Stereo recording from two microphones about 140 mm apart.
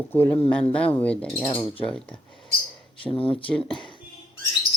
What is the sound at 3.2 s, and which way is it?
Speech, 40° left (ahead or behind).